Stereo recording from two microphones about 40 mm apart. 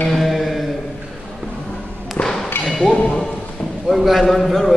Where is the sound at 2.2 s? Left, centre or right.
Left.